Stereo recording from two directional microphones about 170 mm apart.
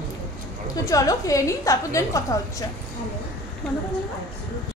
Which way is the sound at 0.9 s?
20° left (ahead or behind).